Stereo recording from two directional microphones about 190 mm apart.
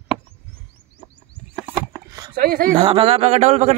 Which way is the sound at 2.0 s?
20° right (ahead or behind).